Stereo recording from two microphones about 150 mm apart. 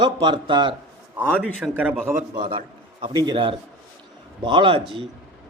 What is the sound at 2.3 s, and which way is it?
A man's voice, 30° right (ahead or behind).